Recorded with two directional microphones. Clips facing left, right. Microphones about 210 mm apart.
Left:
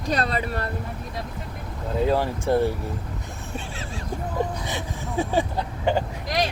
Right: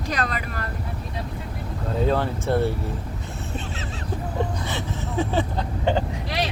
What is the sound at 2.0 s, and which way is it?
Speech, 10° left (ahead or behind).